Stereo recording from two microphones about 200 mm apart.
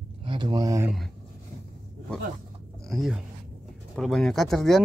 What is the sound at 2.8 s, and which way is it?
Speech, centre (ahead or behind).